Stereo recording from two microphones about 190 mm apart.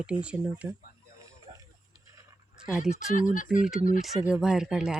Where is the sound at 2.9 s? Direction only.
45° left (ahead or behind).